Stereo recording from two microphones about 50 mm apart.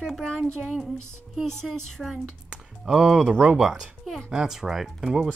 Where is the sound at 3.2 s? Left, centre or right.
Right.